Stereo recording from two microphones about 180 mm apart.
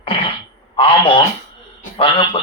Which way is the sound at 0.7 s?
30° left (ahead or behind).